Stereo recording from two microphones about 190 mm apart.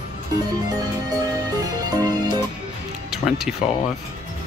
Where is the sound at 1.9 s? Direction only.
20° right (ahead or behind).